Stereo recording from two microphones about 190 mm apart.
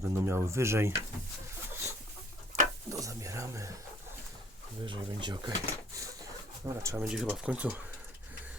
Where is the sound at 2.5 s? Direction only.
15° right (ahead or behind).